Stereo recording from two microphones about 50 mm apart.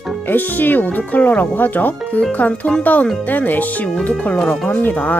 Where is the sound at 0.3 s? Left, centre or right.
Left.